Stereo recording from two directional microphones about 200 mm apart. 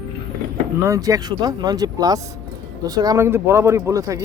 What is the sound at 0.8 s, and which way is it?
Speech, 15° right (ahead or behind).